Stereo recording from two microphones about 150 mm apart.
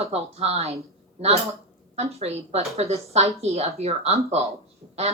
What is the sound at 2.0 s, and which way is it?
Speech, 45° right (ahead or behind).